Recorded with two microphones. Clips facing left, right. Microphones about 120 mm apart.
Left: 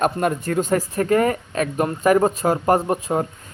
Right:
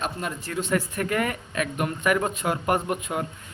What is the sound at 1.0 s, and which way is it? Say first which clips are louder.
Speech: left 8 dB; 35° left (ahead or behind).